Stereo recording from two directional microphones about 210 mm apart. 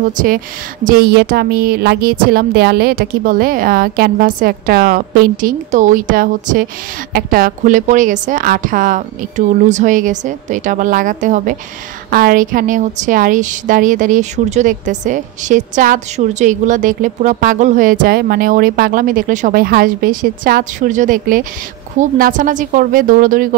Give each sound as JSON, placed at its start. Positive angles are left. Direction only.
{"t": 0.0, "sound": "a woman's voice", "side_deg": -40}